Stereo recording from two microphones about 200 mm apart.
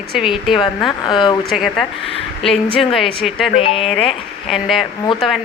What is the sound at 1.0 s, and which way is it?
Speech, 25° left (ahead or behind).